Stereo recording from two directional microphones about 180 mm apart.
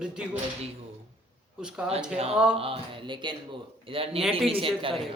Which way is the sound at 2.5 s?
30° right (ahead or behind).